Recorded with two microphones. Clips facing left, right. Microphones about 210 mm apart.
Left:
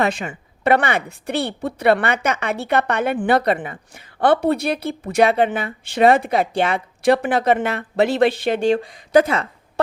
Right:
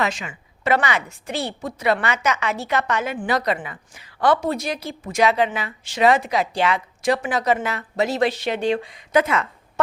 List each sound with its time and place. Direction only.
0.0 s a woman's voice: 55° left (ahead or behind); by 9.8 s 35° left (ahead or behind)